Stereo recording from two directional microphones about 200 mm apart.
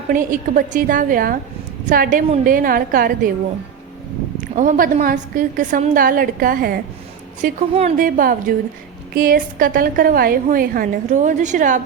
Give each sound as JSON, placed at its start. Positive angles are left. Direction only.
{"t": 0.1, "sound": "a woman's voice", "side_deg": -40}
{"t": 4.5, "sound": "a woman's voice", "side_deg": -40}